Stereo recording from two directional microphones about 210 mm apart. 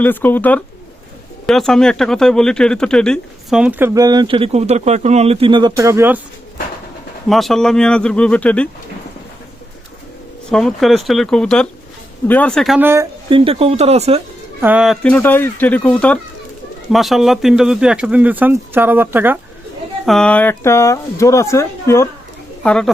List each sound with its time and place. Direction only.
0.0 s speech: 10° left (ahead or behind); by 6.1 s 15° right (ahead or behind)
7.3 s speech: centre (ahead or behind)
10.5 s speech: centre (ahead or behind)
13.3 s speech: 25° right (ahead or behind)
14.6 s speech: 5° right (ahead or behind)
20.1 s speech: 5° left (ahead or behind)